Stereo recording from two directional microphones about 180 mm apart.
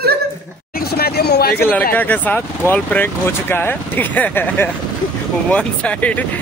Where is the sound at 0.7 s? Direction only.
60° left (ahead or behind).